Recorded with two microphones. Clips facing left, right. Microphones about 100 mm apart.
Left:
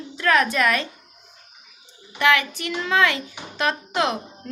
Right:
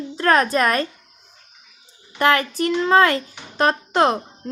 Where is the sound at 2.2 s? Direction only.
40° right (ahead or behind).